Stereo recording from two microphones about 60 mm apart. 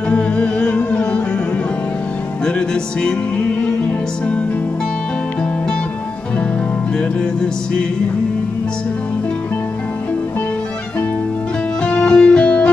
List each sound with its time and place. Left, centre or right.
0.1 s music: left
2.4 s music: centre
11.8 s music: centre